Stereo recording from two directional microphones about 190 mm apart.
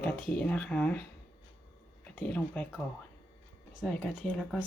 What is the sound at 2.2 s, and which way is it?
Speech, 5° left (ahead or behind).